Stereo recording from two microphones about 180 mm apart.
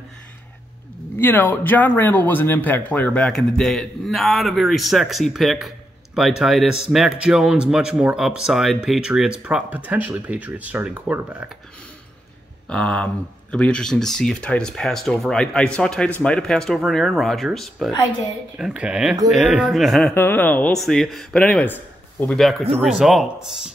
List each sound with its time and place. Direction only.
1.2 s speech: 10° left (ahead or behind); by 11.5 s 10° right (ahead or behind)
12.6 s speech: 5° left (ahead or behind)